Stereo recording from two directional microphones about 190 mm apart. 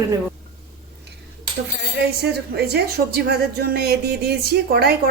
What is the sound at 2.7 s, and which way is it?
Speech, 55° right (ahead or behind).